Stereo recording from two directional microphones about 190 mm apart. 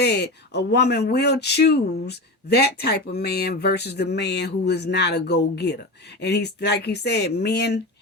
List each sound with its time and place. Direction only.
0.0 s speech: 60° left (ahead or behind)